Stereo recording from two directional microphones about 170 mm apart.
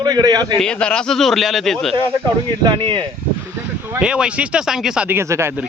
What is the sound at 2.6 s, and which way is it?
Speech, 30° right (ahead or behind).